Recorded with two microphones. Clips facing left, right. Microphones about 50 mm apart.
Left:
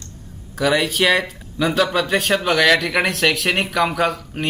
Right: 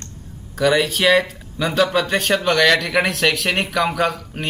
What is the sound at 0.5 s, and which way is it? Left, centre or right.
Speech, centre.